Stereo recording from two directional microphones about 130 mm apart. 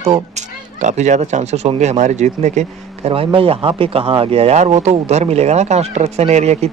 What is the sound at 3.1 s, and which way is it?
Speech, 45° right (ahead or behind).